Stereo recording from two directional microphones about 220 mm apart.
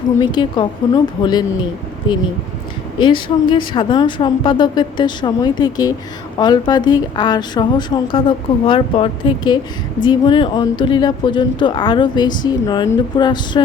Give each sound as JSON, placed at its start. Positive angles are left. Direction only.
{"t": 0.2, "sound": "speech", "side_deg": 20}
{"t": 3.0, "sound": "speech", "side_deg": 20}